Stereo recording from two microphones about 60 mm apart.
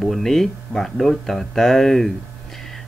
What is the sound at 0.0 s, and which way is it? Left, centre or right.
Speech, centre.